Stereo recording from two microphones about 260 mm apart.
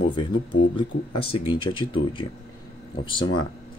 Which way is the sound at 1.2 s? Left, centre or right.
Left.